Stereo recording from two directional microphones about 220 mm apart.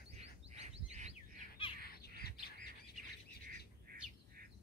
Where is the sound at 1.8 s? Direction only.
45° left (ahead or behind).